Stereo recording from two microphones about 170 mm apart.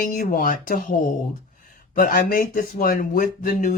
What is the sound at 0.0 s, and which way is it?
Speech, 55° left (ahead or behind).